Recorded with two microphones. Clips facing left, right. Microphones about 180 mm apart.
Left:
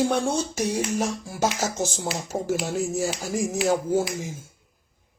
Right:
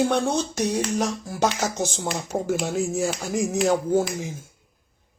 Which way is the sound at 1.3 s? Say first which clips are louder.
Right 2 dB; 5° left (ahead or behind).